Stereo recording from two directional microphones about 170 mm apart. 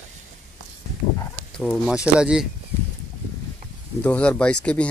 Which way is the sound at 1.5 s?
5° left (ahead or behind).